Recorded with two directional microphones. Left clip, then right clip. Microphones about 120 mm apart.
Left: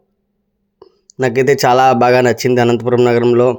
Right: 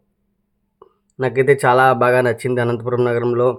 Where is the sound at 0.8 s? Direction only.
10° left (ahead or behind).